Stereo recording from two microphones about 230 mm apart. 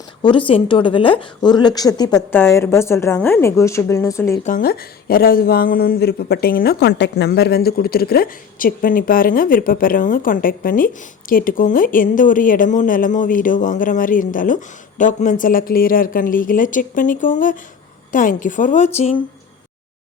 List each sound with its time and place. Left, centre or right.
0.2 s a woman's voice: left
4.4 s speech: left